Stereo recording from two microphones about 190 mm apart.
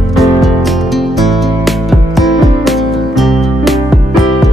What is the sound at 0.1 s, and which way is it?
Music, centre (ahead or behind).